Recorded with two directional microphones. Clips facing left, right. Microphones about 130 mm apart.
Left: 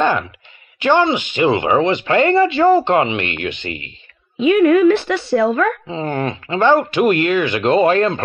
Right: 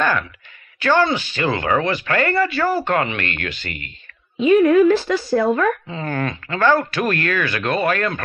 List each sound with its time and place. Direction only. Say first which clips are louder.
0.7 s speech: left 3 dB; 20° left (ahead or behind)
4.5 s a woman's voice: left 1 dB; 70° left (ahead or behind)
5.9 s speech: left 3 dB; 25° left (ahead or behind)